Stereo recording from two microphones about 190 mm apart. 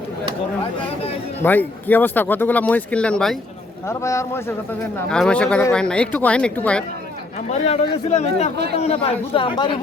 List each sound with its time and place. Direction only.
1.4 s speech: 10° left (ahead or behind)
3.8 s speech: 15° left (ahead or behind)
5.0 s speech: 5° left (ahead or behind)
7.5 s a man's voice: 35° left (ahead or behind)